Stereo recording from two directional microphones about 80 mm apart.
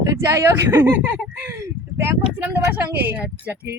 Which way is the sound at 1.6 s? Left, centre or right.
Right.